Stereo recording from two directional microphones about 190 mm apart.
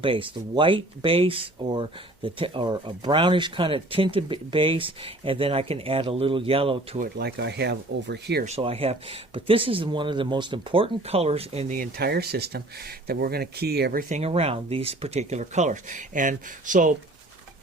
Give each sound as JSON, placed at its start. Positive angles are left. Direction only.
{"t": 0.0, "sound": "speech", "side_deg": -25}
{"t": 7.0, "sound": "speech", "side_deg": -60}
{"t": 8.4, "sound": "speech", "side_deg": -30}
{"t": 11.8, "sound": "speech", "side_deg": -55}
{"t": 14.1, "sound": "speech", "side_deg": -30}